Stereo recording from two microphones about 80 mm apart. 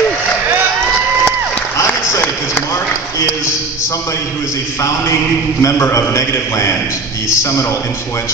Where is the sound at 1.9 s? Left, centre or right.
Left.